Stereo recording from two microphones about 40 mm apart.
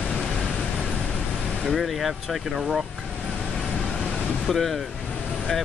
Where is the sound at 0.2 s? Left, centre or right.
Left.